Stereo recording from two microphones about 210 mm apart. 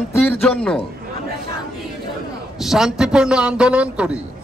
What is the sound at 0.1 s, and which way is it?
Speech, 5° left (ahead or behind).